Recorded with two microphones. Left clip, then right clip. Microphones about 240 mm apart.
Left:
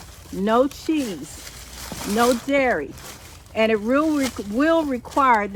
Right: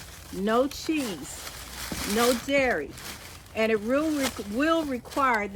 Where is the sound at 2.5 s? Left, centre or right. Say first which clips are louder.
Left 4 dB; centre.